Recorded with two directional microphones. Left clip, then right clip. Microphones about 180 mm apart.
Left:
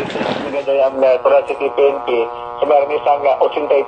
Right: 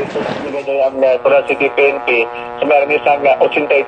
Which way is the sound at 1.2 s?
15° right (ahead or behind).